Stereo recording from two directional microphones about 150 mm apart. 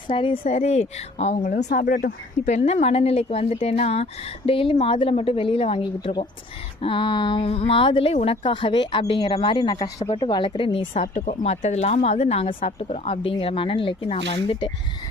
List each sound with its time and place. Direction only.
0.1 s speech: 35° left (ahead or behind)
0.5 s speech: 45° left (ahead or behind)
1.5 s speech: 65° left (ahead or behind)
2.5 s speech: 50° left (ahead or behind)
10.9 s speech: 55° left (ahead or behind); by 14.7 s 35° left (ahead or behind)